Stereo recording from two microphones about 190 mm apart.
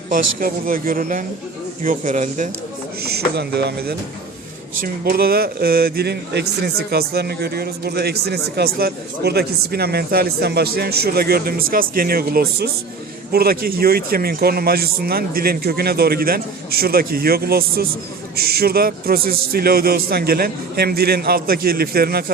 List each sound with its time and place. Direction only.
0.1 s a man's voice: 50° right (ahead or behind)
3.0 s a man's voice: 55° right (ahead or behind)